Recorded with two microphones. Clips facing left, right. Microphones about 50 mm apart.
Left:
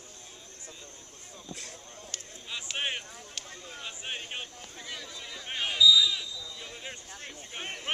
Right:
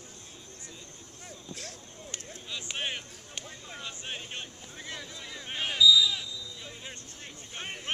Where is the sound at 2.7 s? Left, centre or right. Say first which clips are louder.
Left 3 dB; centre.